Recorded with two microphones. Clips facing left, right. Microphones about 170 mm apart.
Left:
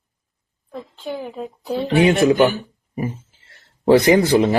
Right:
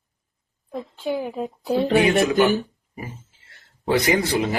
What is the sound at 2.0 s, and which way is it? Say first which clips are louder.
Speech: left 4 dB; 30° left (ahead or behind).